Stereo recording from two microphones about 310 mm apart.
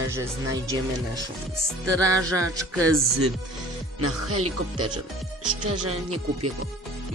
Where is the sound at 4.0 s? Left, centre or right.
Right.